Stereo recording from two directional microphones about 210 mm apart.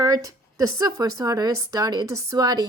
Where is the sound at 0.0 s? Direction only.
15° right (ahead or behind).